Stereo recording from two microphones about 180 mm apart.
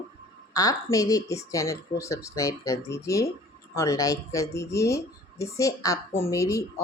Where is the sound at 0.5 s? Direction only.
20° left (ahead or behind).